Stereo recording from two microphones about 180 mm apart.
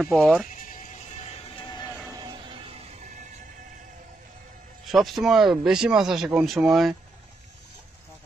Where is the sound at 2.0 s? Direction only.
25° right (ahead or behind); by 3.2 s 40° right (ahead or behind).